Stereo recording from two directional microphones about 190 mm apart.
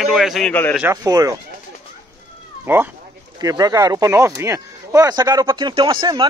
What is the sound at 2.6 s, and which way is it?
Speech, 10° right (ahead or behind).